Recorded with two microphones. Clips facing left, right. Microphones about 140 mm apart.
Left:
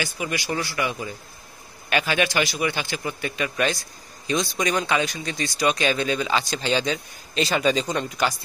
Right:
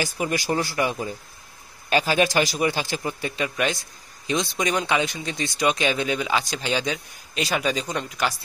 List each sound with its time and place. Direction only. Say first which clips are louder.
0.0 s speech: right 3 dB; 40° right (ahead or behind)
3.5 s speech: left 1 dB; 15° right (ahead or behind)